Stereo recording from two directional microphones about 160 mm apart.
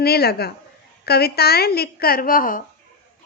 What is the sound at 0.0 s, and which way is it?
A woman's voice, 80° left.